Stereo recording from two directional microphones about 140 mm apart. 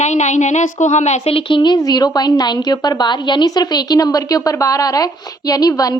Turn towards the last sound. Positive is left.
turn(degrees=25)  # may be behind; listen again after turning